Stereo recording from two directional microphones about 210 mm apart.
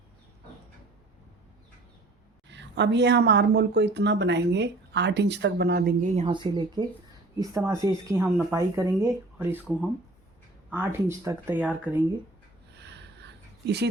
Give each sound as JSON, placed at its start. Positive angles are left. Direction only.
{"t": 2.5, "sound": "a woman's voice", "side_deg": -55}
{"t": 6.1, "sound": "speech", "side_deg": -20}
{"t": 12.7, "sound": "a sound", "side_deg": -55}